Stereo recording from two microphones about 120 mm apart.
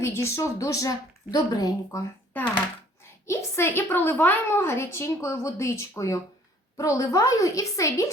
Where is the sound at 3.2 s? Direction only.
20° left (ahead or behind).